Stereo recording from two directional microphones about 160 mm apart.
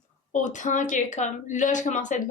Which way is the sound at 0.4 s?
50° left (ahead or behind).